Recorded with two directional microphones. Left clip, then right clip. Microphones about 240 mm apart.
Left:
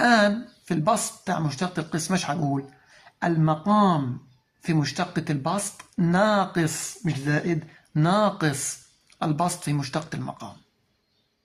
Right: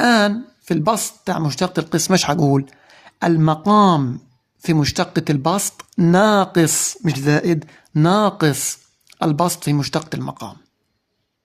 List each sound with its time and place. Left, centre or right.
0.0 s speech: right